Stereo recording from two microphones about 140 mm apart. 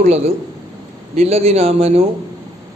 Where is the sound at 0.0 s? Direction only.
50° right (ahead or behind).